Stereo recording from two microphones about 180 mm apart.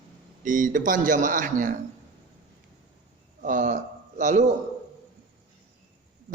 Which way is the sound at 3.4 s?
45° right (ahead or behind).